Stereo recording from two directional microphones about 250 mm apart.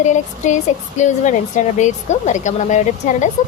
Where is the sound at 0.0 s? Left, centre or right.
Left.